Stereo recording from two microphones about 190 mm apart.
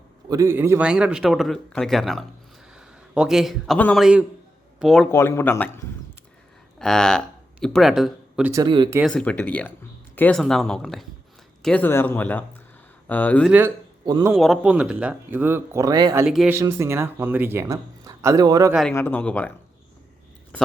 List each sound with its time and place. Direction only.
0.3 s a man's voice: 15° right (ahead or behind); by 5.0 s centre (ahead or behind)
5.1 s speech: 15° left (ahead or behind); by 8.5 s 5° right (ahead or behind)
8.5 s speech: 25° right (ahead or behind)
9.0 s speech: 5° left (ahead or behind)
13.5 s speech: 10° right (ahead or behind)
14.0 s speech: 20° right (ahead or behind)
14.3 s speech: centre (ahead or behind); by 16.2 s 20° right (ahead or behind)
16.2 s speech: centre (ahead or behind)
16.6 s speech: 15° right (ahead or behind)
18.7 s speech: centre (ahead or behind)